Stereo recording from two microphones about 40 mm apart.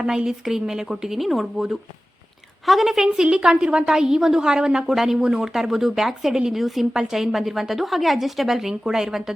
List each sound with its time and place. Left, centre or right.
0.3 s a woman's voice: centre
1.2 s speech: centre
2.6 s a woman's voice: centre
3.3 s a woman's voice: centre
3.8 s a woman's voice: centre